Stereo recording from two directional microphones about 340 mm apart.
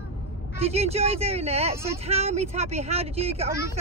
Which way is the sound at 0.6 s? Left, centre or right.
Centre.